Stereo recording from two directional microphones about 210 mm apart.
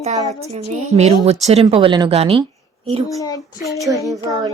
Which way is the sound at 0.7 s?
30° right (ahead or behind).